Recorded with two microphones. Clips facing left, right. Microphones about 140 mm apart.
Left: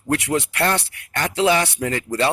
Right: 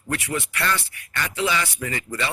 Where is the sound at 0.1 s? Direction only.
75° left (ahead or behind).